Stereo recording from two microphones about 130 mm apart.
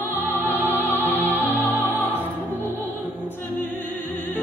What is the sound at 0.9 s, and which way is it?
Music, 15° right (ahead or behind).